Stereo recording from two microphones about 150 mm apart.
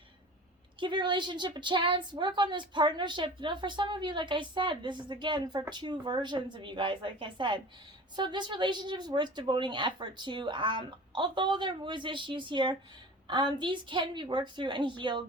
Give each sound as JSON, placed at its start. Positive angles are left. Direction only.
{"t": 0.8, "sound": "a woman's voice", "side_deg": -30}